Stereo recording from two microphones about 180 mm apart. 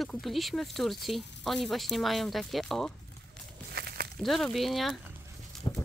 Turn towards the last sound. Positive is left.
turn(degrees=25)  # may be behind; listen again after turning